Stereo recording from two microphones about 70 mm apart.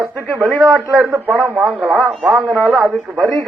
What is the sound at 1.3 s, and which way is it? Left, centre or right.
Speech, right.